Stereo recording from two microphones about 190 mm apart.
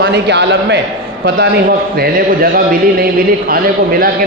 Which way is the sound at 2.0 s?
50° right (ahead or behind).